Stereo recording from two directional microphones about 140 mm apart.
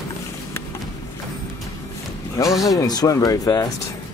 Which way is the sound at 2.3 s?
25° left (ahead or behind).